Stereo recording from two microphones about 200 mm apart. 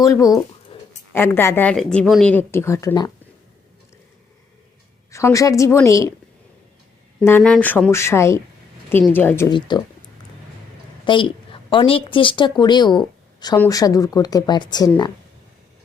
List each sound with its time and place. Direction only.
0.0 s speech: 15° left (ahead or behind)
0.7 s a sound: 25° left (ahead or behind)
1.1 s speech: 10° left (ahead or behind)
5.1 s speech: 15° left (ahead or behind)
7.2 s speech: 10° left (ahead or behind)
9.6 s a woman's voice: 25° left (ahead or behind)